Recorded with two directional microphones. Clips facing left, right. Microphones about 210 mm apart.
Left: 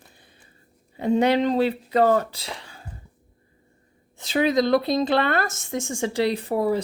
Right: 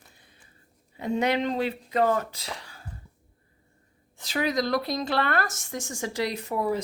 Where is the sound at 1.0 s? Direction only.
30° left (ahead or behind).